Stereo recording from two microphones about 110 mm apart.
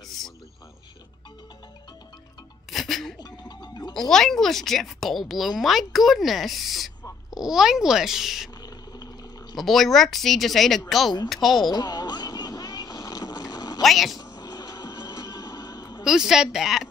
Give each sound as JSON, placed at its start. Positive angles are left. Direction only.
{"t": 2.7, "sound": "music", "side_deg": 0}
{"t": 3.2, "sound": "music", "side_deg": 40}
{"t": 3.9, "sound": "a woman's voice", "side_deg": 5}
{"t": 8.6, "sound": "a sound", "side_deg": 35}
{"t": 9.6, "sound": "a woman's voice", "side_deg": 0}
{"t": 11.7, "sound": "vehicle", "side_deg": 40}
{"t": 13.8, "sound": "speech", "side_deg": 0}
{"t": 14.1, "sound": "music", "side_deg": 35}
{"t": 16.0, "sound": "a woman's voice", "side_deg": -5}